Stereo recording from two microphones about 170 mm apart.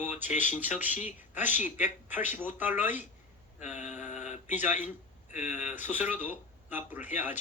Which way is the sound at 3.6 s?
45° left (ahead or behind).